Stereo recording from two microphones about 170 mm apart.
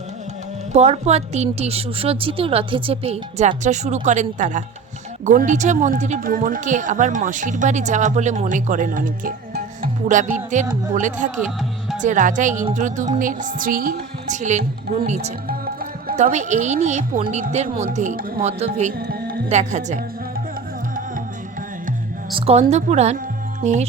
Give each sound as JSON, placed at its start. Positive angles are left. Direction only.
{"t": 0.7, "sound": "a woman's voice", "side_deg": -40}
{"t": 9.8, "sound": "music", "side_deg": -50}
{"t": 10.3, "sound": "speech", "side_deg": -45}
{"t": 15.4, "sound": "speech", "side_deg": -60}
{"t": 18.4, "sound": "a woman's voice", "side_deg": -40}
{"t": 18.9, "sound": "music", "side_deg": -65}
{"t": 19.5, "sound": "speech", "side_deg": -45}
{"t": 22.4, "sound": "a woman's voice", "side_deg": -35}